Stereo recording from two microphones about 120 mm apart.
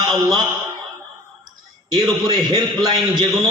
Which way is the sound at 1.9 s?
35° right (ahead or behind).